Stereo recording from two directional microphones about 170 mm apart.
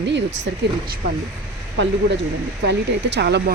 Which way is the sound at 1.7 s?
90° right.